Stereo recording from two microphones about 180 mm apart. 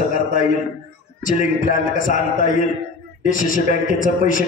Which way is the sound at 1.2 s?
50° left (ahead or behind).